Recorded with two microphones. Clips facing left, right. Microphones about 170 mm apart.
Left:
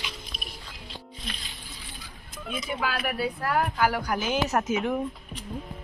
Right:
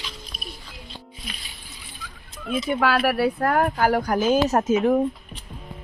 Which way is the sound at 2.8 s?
80° right.